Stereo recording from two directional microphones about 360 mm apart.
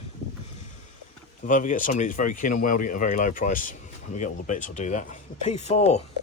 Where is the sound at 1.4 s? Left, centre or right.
Left.